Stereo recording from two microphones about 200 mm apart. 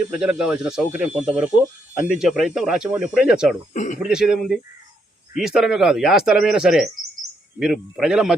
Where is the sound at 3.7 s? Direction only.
40° left (ahead or behind).